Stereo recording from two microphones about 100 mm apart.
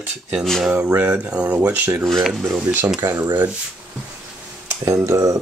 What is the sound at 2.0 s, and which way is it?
Speech, centre (ahead or behind).